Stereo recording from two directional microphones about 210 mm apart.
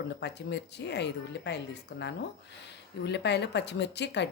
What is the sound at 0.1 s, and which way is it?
Speech, 55° left (ahead or behind).